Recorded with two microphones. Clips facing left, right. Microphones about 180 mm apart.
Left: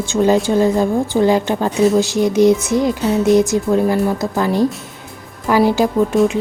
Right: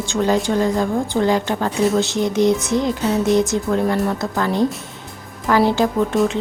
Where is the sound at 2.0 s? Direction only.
20° right (ahead or behind).